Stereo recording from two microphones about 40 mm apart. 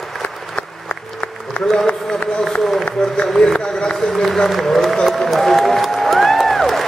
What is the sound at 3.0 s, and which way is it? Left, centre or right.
Run, centre.